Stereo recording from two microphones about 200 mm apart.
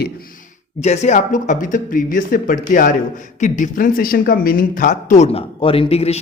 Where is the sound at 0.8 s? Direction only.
35° left (ahead or behind).